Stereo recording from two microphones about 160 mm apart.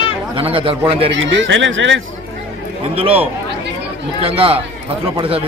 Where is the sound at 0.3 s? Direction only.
35° right (ahead or behind).